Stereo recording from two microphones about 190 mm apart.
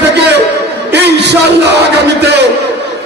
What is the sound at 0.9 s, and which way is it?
A man's voice, 60° right (ahead or behind).